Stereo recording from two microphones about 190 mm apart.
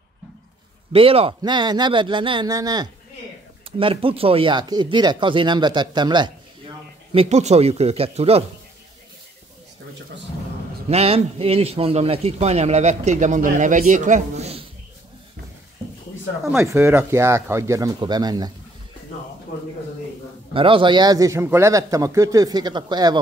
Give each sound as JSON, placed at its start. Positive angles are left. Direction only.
{"t": 0.9, "sound": "speech", "side_deg": -30}
{"t": 7.1, "sound": "a man's voice", "side_deg": -35}
{"t": 10.9, "sound": "a man's voice", "side_deg": -30}
{"t": 16.4, "sound": "speech", "side_deg": -10}
{"t": 20.5, "sound": "speech", "side_deg": -25}